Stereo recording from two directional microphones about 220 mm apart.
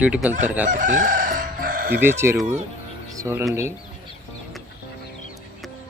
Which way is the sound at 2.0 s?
10° right (ahead or behind).